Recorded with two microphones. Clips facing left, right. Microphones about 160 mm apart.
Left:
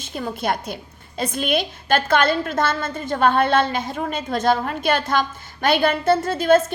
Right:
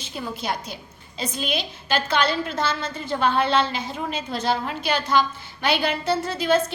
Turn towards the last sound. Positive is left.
turn(degrees=50)  # may be behind; listen again after turning